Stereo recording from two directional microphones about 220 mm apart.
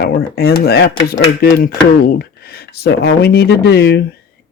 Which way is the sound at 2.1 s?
45° left (ahead or behind).